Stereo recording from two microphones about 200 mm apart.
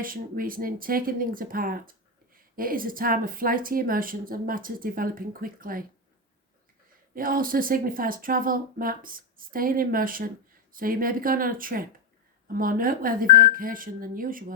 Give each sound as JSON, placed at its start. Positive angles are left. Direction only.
{"t": 0.0, "sound": "speech", "side_deg": -45}
{"t": 7.1, "sound": "speech", "side_deg": -45}